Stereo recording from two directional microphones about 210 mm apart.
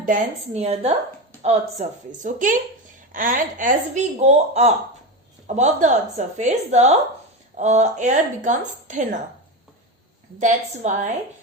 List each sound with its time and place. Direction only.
0.0 s a woman's voice: 35° right (ahead or behind)
10.4 s a woman's voice: 35° right (ahead or behind)